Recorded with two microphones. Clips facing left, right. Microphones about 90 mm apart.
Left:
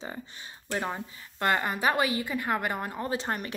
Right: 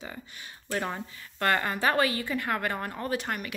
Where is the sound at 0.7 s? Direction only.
15° left (ahead or behind).